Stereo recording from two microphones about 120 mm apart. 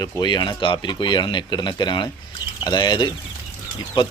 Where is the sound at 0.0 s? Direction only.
35° left (ahead or behind).